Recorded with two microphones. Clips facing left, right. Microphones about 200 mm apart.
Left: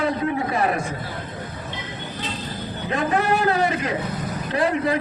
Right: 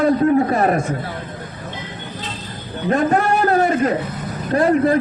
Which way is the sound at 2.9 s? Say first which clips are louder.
Right 5 dB; 45° right (ahead or behind).